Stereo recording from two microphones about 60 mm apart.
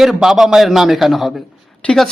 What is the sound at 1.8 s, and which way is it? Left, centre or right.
Speech, left.